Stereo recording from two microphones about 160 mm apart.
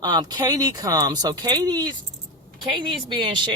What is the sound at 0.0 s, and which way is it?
Speech, 25° right (ahead or behind).